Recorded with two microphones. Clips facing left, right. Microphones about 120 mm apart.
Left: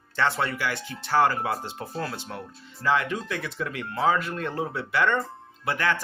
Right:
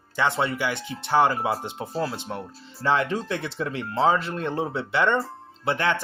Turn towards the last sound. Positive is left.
turn(degrees=-25)  # may be behind; listen again after turning